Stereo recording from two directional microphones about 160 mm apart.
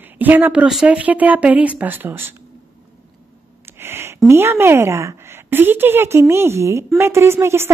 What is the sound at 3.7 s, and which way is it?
A woman's voice, 15° right (ahead or behind).